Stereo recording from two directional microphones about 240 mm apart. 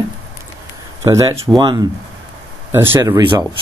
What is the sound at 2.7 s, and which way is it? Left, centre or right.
Speech, centre.